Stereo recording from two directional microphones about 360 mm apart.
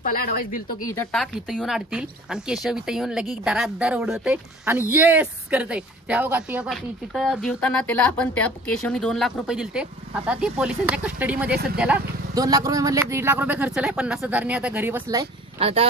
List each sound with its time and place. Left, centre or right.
0.0 s speech: left
0.9 s speech: centre